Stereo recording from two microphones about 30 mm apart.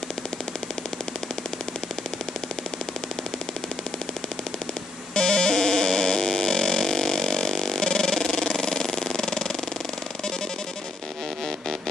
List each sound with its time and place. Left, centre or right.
5.1 s music: left